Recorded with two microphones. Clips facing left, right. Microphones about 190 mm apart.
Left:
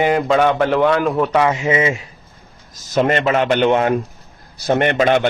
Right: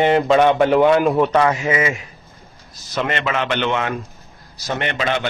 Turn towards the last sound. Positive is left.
turn(degrees=50)  # may be behind; listen again after turning